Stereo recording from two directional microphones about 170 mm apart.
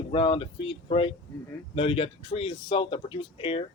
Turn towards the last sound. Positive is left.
turn(degrees=30)  # may be behind; listen again after turning